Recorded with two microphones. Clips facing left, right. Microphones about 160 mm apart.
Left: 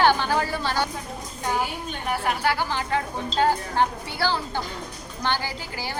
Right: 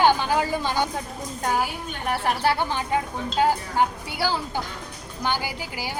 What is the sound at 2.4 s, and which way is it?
Speech, 25° right (ahead or behind).